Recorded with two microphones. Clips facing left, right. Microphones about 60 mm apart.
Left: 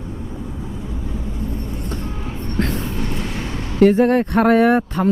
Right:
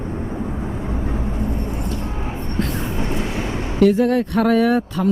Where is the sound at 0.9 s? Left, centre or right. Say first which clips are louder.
Right 4 dB; right.